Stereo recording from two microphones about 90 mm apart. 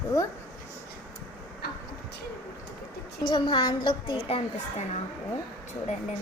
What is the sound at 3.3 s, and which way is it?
A woman's voice, 60° left (ahead or behind).